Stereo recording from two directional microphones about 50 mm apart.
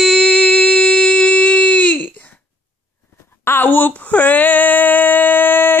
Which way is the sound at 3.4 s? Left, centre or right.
Left.